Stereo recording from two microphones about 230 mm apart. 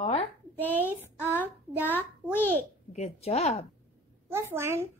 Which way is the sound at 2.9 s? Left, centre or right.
Left.